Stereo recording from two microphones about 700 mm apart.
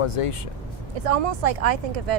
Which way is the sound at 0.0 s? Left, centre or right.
Left.